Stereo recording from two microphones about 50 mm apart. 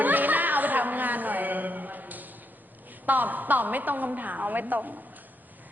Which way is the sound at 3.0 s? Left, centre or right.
Right.